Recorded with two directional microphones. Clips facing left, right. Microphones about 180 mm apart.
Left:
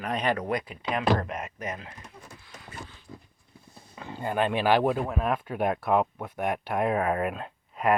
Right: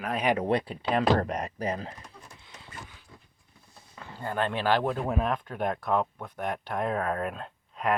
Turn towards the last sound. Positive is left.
turn(degrees=5)  # may be behind; listen again after turning